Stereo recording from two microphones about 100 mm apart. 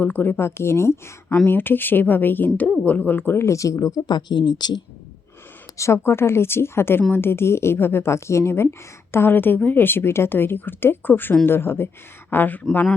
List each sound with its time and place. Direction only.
0.0 s a woman's voice: 15° left (ahead or behind); by 4.8 s 45° left (ahead or behind)
5.7 s a woman's voice: 30° left (ahead or behind)